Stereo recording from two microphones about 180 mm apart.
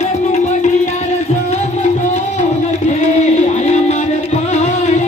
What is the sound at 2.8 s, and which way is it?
Music, 40° left (ahead or behind).